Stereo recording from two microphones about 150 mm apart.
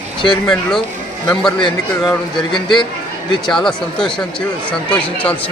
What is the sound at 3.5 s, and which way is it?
Speech, 5° left (ahead or behind).